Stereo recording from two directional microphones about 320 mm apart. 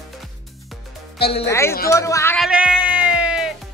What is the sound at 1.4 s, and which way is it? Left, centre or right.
Speech, centre.